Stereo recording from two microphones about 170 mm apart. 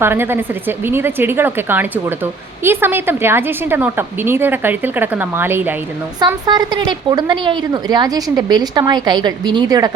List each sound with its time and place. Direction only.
0.0 s a woman's voice: 15° right (ahead or behind)
6.1 s a woman's voice: 25° right (ahead or behind)